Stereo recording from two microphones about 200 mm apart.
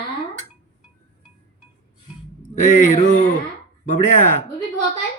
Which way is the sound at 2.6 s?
40° left (ahead or behind).